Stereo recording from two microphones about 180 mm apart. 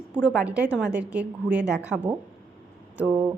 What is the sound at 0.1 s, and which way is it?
A woman's voice, 5° right (ahead or behind).